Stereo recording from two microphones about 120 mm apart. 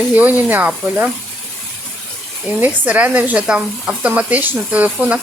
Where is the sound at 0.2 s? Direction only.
15° right (ahead or behind).